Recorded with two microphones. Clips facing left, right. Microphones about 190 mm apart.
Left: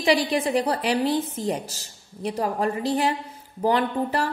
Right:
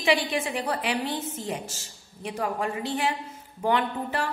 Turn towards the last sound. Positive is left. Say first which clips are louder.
# left 5 dB
turn(degrees=35)  # may be behind; listen again after turning